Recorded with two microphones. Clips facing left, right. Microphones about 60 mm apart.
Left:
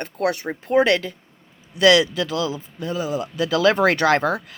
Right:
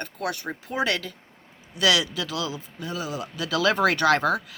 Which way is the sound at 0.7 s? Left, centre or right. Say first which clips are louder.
Left 9 dB; left.